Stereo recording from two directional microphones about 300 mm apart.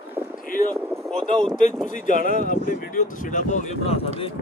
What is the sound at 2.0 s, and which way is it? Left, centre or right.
Speech, left.